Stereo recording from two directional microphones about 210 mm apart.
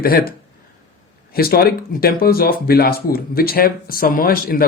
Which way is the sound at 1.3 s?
45° left (ahead or behind).